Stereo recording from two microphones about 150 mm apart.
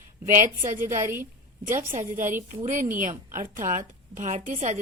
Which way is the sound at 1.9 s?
60° right (ahead or behind).